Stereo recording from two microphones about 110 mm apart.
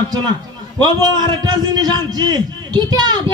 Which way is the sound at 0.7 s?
40° right (ahead or behind).